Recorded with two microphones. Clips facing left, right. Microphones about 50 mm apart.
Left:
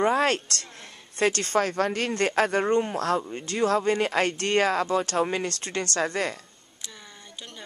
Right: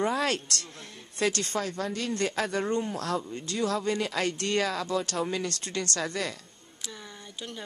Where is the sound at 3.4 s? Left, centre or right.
Left.